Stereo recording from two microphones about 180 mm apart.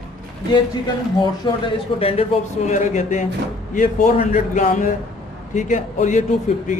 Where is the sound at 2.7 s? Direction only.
45° left (ahead or behind).